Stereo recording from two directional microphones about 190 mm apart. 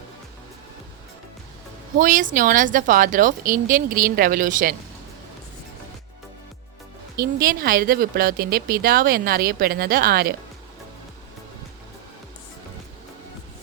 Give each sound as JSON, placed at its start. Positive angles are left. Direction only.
{"t": 2.0, "sound": "speech", "side_deg": -45}
{"t": 7.2, "sound": "speech", "side_deg": -50}